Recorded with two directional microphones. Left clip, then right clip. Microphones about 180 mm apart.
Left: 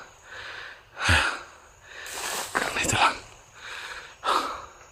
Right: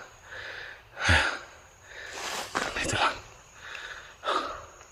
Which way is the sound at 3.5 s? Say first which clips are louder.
Left 3 dB; 30° left (ahead or behind).